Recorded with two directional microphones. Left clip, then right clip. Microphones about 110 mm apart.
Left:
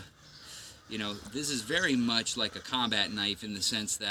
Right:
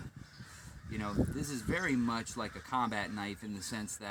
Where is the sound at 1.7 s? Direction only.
30° right (ahead or behind).